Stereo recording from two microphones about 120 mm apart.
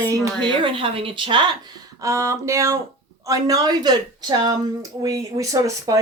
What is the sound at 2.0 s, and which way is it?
Speech, 25° right (ahead or behind).